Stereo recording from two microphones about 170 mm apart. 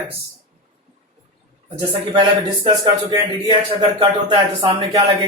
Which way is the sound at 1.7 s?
35° right (ahead or behind).